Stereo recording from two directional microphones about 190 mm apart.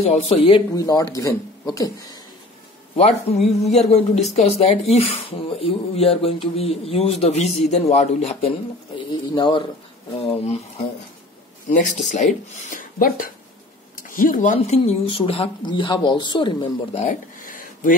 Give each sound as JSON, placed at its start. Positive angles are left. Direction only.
{"t": 0.0, "sound": "speech", "side_deg": 30}
{"t": 3.0, "sound": "speech", "side_deg": 35}
{"t": 12.7, "sound": "speech", "side_deg": 50}